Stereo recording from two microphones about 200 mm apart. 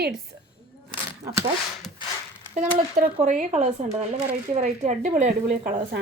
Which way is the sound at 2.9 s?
40° right (ahead or behind).